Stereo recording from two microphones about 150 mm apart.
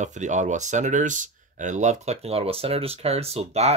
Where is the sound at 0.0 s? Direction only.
55° right (ahead or behind).